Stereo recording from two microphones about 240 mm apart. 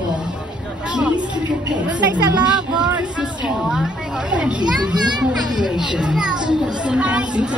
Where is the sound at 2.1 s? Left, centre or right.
Centre.